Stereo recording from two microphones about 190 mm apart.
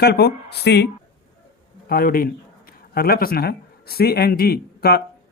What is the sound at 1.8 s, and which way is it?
A man's voice, 50° left (ahead or behind).